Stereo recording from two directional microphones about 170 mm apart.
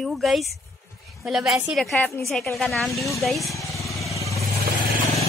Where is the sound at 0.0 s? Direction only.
Centre (ahead or behind).